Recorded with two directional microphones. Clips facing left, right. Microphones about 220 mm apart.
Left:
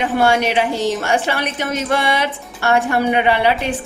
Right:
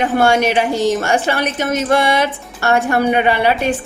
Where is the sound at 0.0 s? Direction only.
45° right (ahead or behind).